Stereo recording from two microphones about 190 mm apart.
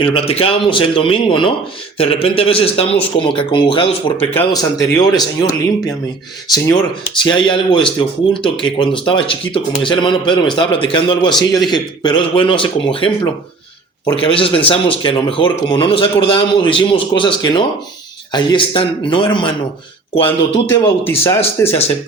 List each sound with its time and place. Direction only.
0.0 s speech: 30° left (ahead or behind)
4.2 s speech: 15° left (ahead or behind)
6.5 s speech: 20° left (ahead or behind)
20.7 s speech: 15° left (ahead or behind)